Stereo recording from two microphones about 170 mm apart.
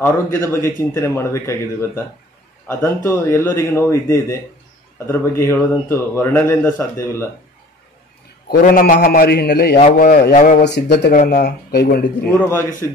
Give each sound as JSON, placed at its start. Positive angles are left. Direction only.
{"t": 0.0, "sound": "speech", "side_deg": 15}
{"t": 8.5, "sound": "a man's voice", "side_deg": 55}
{"t": 9.9, "sound": "speech", "side_deg": 55}
{"t": 10.6, "sound": "speech", "side_deg": 85}
{"t": 11.2, "sound": "speech", "side_deg": 70}
{"t": 12.4, "sound": "speech", "side_deg": 15}